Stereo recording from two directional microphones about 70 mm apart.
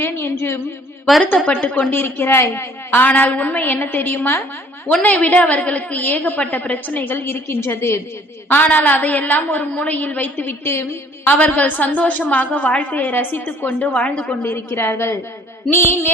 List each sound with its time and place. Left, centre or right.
0.0 s a woman's voice: left
1.5 s a woman's voice: centre
1.9 s a woman's voice: left
8.4 s a woman's voice: left
11.3 s a woman's voice: left
14.5 s a woman's voice: left